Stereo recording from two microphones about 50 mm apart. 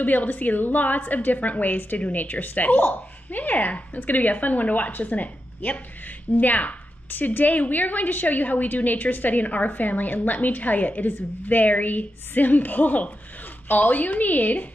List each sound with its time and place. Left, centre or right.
0.0 s a woman's voice: left